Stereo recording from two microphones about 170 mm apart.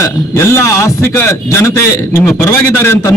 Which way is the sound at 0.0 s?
15° left (ahead or behind).